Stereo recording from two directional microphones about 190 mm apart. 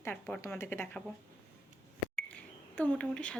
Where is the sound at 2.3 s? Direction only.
5° left (ahead or behind).